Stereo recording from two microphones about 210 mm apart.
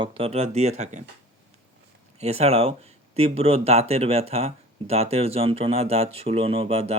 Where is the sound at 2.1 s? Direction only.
30° right (ahead or behind).